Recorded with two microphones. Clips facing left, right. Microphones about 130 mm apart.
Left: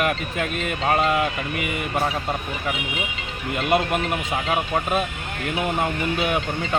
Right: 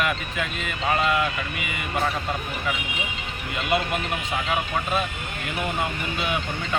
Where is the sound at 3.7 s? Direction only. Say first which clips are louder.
Left 3 dB; 45° left (ahead or behind).